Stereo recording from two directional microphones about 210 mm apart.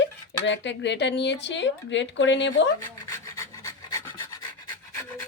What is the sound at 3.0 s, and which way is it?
Filing, 15° left (ahead or behind).